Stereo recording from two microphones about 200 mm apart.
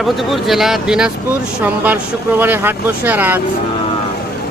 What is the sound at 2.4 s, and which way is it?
Speech, 10° right (ahead or behind).